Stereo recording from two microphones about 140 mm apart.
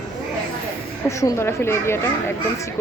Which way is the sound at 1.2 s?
20° left (ahead or behind).